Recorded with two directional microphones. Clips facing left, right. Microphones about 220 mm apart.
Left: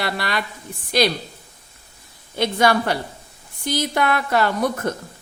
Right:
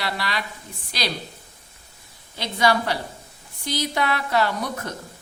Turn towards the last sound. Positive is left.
turn(degrees=50)  # may be behind; listen again after turning